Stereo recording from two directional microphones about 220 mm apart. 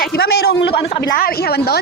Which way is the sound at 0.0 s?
45° left (ahead or behind).